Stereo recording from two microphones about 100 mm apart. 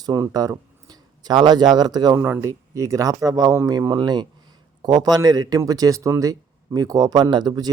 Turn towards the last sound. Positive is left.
turn(degrees=-45)  # may be behind; listen again after turning